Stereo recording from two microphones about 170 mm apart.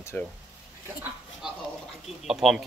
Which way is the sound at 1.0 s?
Centre (ahead or behind).